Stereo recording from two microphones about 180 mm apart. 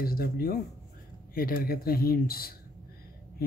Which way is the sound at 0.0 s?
55° left (ahead or behind).